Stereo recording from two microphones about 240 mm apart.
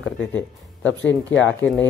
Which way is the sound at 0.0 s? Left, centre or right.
Centre.